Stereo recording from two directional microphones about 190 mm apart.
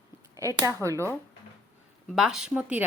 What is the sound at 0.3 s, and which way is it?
Speech, 15° right (ahead or behind).